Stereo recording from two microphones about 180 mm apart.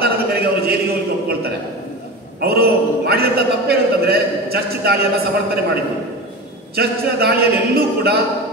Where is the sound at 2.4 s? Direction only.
60° right (ahead or behind).